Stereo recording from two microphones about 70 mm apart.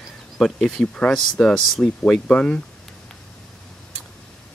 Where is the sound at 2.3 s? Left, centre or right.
Centre.